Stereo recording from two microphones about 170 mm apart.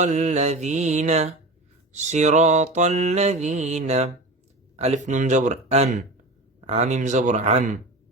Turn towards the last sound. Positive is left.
turn(degrees=-45)  # may be behind; listen again after turning